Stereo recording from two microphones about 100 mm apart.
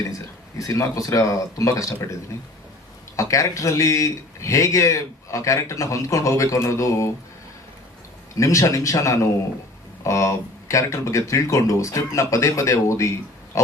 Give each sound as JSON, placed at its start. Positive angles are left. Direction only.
{"t": 0.6, "sound": "speech", "side_deg": 35}
{"t": 3.2, "sound": "speech", "side_deg": 35}
{"t": 8.4, "sound": "speech", "side_deg": 30}